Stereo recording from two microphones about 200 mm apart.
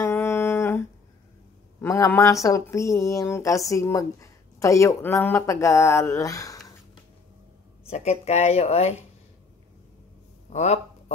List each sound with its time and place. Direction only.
0.0 s humming: 10° left (ahead or behind)
1.8 s speech: 15° left (ahead or behind)
7.9 s speech: 35° left (ahead or behind)
10.5 s a man's voice: 35° left (ahead or behind)